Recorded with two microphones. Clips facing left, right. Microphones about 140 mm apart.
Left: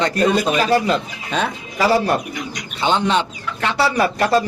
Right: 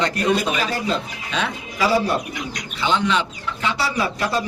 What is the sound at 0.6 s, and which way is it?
Speech, 70° left (ahead or behind).